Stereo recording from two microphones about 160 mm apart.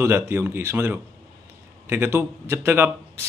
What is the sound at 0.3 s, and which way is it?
A man's voice, 15° right (ahead or behind).